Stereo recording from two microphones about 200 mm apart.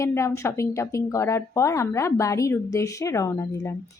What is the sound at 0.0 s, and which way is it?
A woman's voice, 15° left (ahead or behind).